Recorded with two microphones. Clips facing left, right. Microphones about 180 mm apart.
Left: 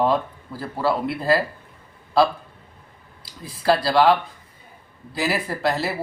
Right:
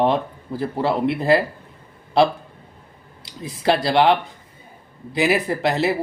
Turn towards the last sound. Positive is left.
turn(degrees=-20)  # may be behind; listen again after turning